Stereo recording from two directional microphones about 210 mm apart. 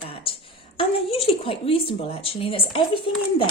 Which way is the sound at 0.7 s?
25° left (ahead or behind).